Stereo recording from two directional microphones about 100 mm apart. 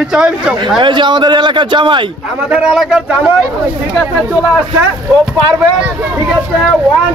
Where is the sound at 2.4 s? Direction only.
10° right (ahead or behind).